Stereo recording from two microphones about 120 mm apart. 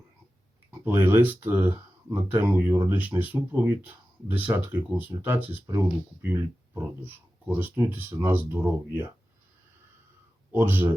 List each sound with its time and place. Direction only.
0.7 s speech: 15° right (ahead or behind)
10.5 s speech: 15° right (ahead or behind)